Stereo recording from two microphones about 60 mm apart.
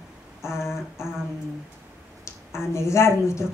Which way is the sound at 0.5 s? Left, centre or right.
Left.